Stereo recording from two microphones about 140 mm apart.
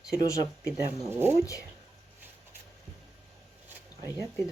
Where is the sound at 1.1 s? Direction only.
15° right (ahead or behind).